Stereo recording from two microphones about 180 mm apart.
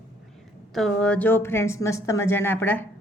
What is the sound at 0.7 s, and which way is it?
A woman's voice, centre (ahead or behind).